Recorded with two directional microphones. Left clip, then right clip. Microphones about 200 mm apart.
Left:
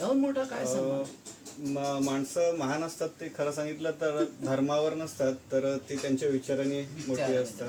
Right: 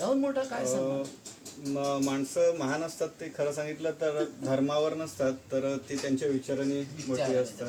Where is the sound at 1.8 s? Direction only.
20° right (ahead or behind).